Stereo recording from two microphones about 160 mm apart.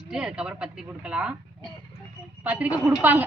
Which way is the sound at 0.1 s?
5° right (ahead or behind).